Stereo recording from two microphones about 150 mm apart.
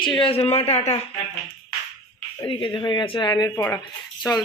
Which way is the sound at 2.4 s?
35° left (ahead or behind).